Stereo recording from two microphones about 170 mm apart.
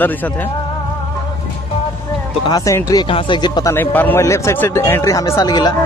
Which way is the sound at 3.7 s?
10° left (ahead or behind).